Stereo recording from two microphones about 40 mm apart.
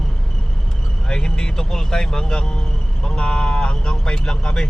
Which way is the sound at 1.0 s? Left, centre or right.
Left.